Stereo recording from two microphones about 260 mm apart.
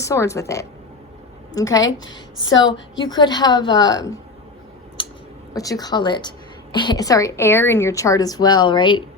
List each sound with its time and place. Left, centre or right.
0.0 s a woman's voice: centre
3.0 s a woman's voice: centre
5.5 s a woman's voice: centre